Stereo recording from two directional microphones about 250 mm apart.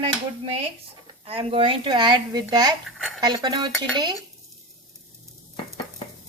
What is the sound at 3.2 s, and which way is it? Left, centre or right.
Speech, centre.